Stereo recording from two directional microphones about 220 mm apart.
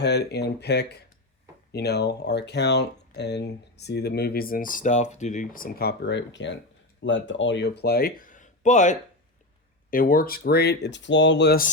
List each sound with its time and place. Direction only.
0.0 s speech: 50° left (ahead or behind)